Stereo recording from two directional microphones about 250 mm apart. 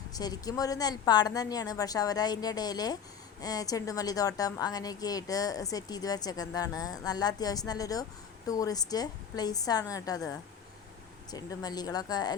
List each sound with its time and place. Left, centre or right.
0.1 s a woman's voice: centre